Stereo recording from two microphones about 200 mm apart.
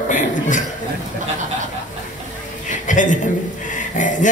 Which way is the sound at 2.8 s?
40° left (ahead or behind).